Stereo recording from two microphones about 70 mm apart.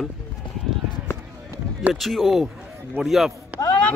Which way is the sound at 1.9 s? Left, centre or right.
Centre.